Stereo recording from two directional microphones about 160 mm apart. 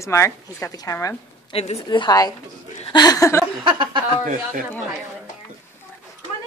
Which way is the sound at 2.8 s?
25° left (ahead or behind).